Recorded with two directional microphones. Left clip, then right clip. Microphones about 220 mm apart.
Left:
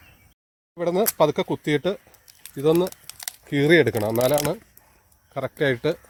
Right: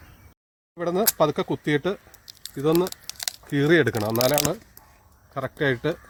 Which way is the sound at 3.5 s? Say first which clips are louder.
Left 2 dB; 35° left (ahead or behind).